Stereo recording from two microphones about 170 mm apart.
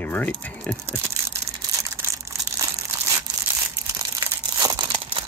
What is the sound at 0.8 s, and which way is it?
Crushing, 15° right (ahead or behind).